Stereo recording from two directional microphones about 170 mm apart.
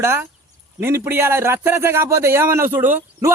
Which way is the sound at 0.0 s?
15° right (ahead or behind).